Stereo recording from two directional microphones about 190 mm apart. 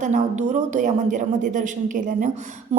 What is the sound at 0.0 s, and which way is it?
A woman's voice, 40° right (ahead or behind).